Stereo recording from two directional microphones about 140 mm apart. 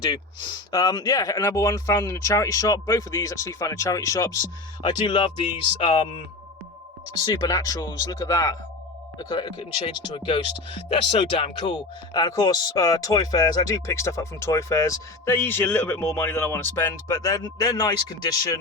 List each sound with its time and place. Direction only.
0.0 s speech: 30° left (ahead or behind)
4.8 s speech: 35° left (ahead or behind)
7.4 s speech: 25° left (ahead or behind)
9.1 s speech: 35° left (ahead or behind)
12.2 s speech: 25° left (ahead or behind)